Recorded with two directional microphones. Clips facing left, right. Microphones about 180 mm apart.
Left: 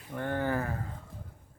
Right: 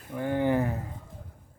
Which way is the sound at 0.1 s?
10° right (ahead or behind).